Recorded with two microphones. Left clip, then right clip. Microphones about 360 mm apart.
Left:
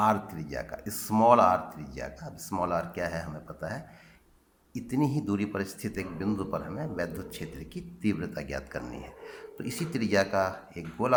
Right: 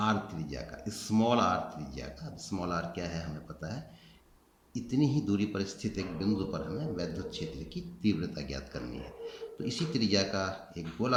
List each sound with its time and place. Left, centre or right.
0.4 s speech: centre